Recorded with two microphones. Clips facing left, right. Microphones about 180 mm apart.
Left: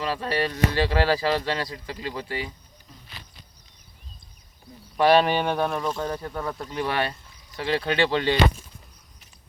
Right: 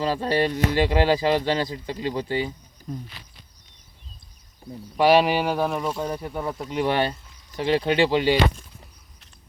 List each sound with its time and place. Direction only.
0.0 s speech: 30° right (ahead or behind)
2.9 s speech: 50° right (ahead or behind)
4.9 s speech: 10° right (ahead or behind)
6.7 s speech: 20° right (ahead or behind)